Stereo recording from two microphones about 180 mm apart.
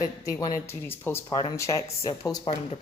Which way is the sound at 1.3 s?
25° left (ahead or behind).